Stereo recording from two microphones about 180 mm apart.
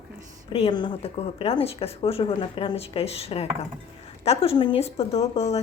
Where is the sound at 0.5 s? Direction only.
30° left (ahead or behind).